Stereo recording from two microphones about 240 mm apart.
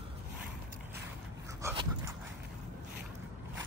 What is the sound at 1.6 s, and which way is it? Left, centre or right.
Dog, centre.